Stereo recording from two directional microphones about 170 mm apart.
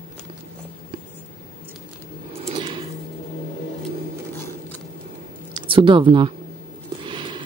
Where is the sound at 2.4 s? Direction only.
30° right (ahead or behind).